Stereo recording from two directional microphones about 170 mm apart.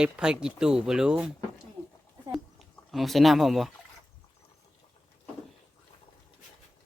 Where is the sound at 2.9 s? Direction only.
Centre (ahead or behind).